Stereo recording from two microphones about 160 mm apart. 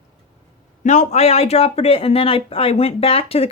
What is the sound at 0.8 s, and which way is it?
Speech, 45° left (ahead or behind).